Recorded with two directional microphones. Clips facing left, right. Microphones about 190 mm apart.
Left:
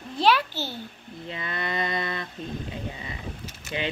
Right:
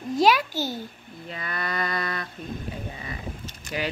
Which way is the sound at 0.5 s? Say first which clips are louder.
Right 4 dB; 45° right (ahead or behind).